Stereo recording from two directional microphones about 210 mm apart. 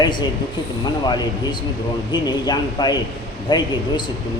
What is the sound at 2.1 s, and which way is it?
A man's voice, 20° left (ahead or behind).